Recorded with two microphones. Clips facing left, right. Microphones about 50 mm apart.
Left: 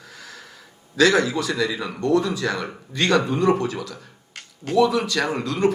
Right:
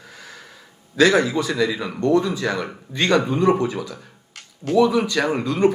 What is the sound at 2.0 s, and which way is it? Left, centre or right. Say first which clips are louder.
Speech: right 2 dB; centre.